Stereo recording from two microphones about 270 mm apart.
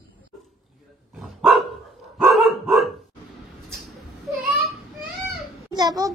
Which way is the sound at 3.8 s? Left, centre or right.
Centre.